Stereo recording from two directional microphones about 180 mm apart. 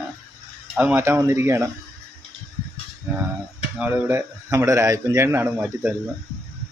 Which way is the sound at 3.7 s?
5° right (ahead or behind).